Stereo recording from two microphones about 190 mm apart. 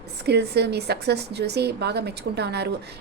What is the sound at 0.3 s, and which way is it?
A woman's voice, 60° right (ahead or behind).